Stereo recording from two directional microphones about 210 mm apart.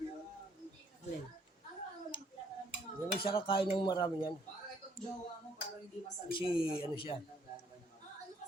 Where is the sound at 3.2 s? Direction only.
25° left (ahead or behind).